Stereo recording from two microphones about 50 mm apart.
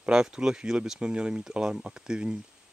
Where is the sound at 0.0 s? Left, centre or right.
Centre.